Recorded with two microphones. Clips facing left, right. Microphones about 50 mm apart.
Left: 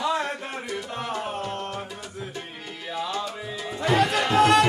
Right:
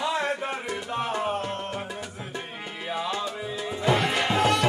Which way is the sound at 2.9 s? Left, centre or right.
Centre.